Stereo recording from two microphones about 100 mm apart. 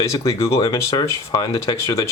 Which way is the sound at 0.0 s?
30° left (ahead or behind).